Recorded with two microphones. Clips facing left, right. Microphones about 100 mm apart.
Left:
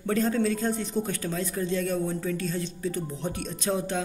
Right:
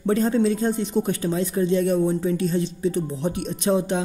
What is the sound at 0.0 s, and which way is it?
A man's voice, 25° right (ahead or behind).